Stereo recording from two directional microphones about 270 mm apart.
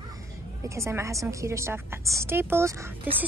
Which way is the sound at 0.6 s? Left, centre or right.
Centre.